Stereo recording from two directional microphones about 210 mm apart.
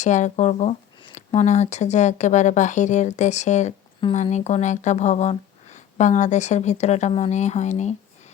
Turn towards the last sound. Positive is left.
turn(degrees=35)  # may be behind; listen again after turning